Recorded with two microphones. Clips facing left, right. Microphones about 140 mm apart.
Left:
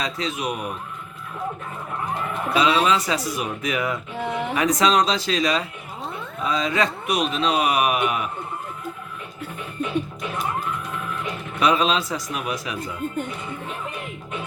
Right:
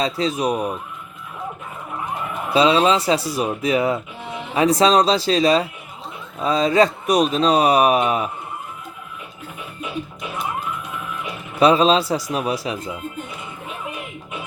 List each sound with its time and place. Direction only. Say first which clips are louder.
0.0 s speech: right 6 dB; 35° right (ahead or behind)
2.5 s speech: right 4 dB; 30° right (ahead or behind)
11.6 s speech: right 6 dB; 30° right (ahead or behind)